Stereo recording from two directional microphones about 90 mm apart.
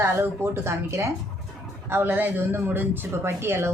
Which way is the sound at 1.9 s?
20° right (ahead or behind).